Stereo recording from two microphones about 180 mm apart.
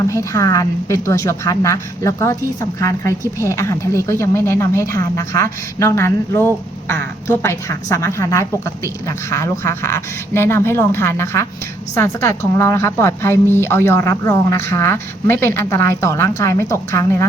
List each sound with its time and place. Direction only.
0.1 s a woman's voice: 20° left (ahead or behind)